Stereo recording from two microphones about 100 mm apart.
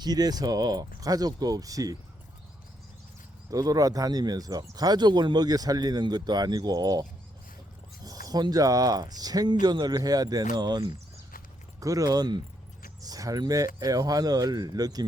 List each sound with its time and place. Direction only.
0.0 s speech: 40° right (ahead or behind)
3.5 s speech: 35° right (ahead or behind)